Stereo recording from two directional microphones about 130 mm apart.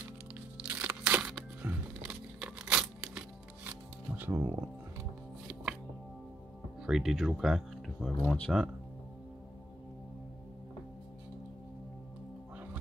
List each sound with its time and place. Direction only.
0.6 s a sound: 15° right (ahead or behind)
4.2 s speech: 20° right (ahead or behind)
6.8 s speech: centre (ahead or behind)
8.2 s speech: 15° left (ahead or behind)